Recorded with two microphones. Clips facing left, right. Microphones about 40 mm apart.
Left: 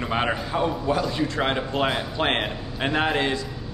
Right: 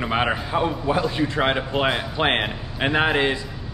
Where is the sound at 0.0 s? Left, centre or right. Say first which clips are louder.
Right 2 dB; centre.